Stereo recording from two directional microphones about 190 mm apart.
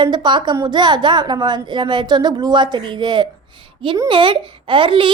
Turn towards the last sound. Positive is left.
turn(degrees=-25)  # may be behind; listen again after turning